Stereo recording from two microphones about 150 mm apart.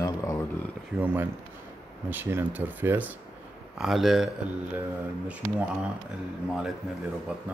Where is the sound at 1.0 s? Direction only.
15° right (ahead or behind).